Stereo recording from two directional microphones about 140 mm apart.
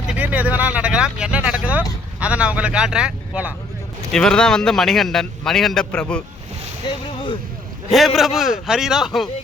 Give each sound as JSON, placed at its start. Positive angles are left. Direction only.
{"t": 0.1, "sound": "speech", "side_deg": -10}
{"t": 4.1, "sound": "speech", "side_deg": 5}
{"t": 6.8, "sound": "a sound", "side_deg": 35}
{"t": 7.9, "sound": "speech", "side_deg": 0}